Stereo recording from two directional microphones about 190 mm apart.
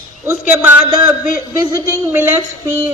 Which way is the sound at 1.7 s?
10° right (ahead or behind).